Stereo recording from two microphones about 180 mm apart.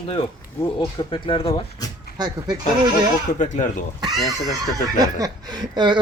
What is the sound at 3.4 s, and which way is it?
Speech, 45° left (ahead or behind).